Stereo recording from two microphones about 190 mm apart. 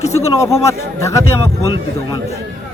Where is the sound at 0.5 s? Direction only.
15° left (ahead or behind).